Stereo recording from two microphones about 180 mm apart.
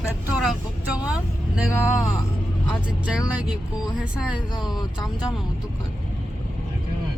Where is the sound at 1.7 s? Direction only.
15° left (ahead or behind).